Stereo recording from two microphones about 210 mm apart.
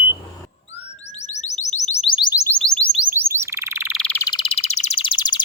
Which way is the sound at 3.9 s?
5° left (ahead or behind).